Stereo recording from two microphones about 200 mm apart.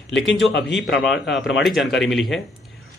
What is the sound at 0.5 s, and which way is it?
Speech, 65° left (ahead or behind).